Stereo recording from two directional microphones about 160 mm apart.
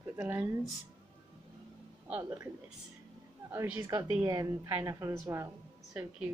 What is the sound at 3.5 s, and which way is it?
A woman's voice, 10° right (ahead or behind).